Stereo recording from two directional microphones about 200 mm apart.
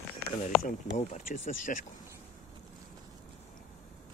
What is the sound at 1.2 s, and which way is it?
Speech, 40° left (ahead or behind).